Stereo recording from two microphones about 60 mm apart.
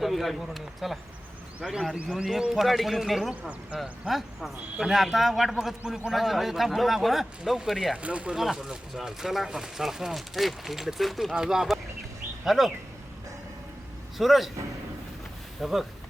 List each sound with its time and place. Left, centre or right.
0.0 s a man's voice: centre
8.0 s speech: right
8.4 s a man's voice: centre
14.2 s a man's voice: centre
15.6 s a man's voice: centre